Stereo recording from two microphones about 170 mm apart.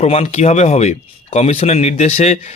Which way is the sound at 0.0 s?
40° left (ahead or behind).